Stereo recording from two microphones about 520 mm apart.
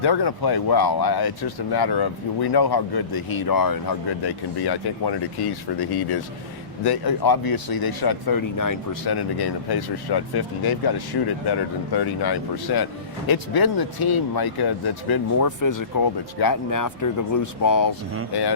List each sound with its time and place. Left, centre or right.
0.0 s speech: left
18.3 s speech: left